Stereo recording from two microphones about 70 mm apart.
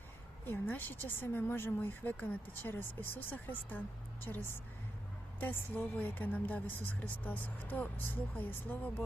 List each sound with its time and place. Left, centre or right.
0.4 s a woman's voice: left
5.4 s a woman's voice: left